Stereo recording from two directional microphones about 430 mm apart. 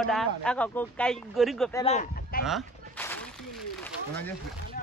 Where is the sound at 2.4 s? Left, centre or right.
Centre.